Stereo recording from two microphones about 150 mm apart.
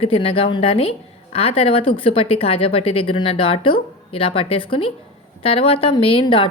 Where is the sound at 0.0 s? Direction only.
40° left (ahead or behind).